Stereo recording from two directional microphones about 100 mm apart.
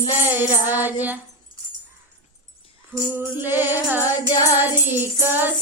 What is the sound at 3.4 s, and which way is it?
Music, 20° right (ahead or behind).